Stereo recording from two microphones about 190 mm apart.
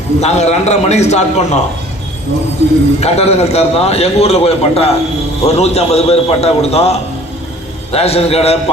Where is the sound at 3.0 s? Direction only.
35° left (ahead or behind).